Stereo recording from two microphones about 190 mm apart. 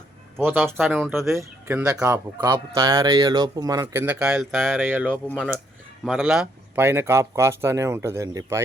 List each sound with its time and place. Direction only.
0.3 s a man's voice: 10° right (ahead or behind)